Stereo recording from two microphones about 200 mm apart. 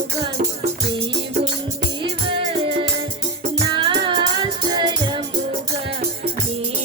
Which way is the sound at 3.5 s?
25° right (ahead or behind).